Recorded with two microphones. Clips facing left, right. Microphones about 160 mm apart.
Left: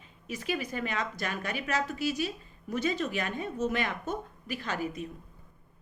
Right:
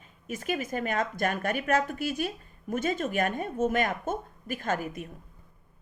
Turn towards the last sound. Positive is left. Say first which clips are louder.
# right 3 dB
turn(degrees=-50)  # may be behind; listen again after turning